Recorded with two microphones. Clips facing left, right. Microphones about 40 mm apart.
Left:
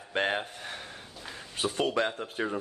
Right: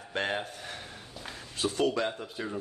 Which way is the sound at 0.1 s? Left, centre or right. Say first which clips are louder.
Left 3 dB; centre.